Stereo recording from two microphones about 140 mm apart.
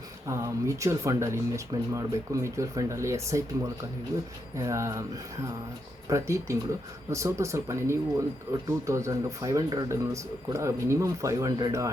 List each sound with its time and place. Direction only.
0.3 s speech: 20° right (ahead or behind)